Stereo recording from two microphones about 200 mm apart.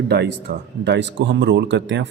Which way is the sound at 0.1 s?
55° right (ahead or behind).